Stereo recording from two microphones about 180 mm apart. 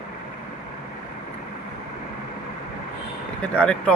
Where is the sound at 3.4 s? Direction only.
5° left (ahead or behind).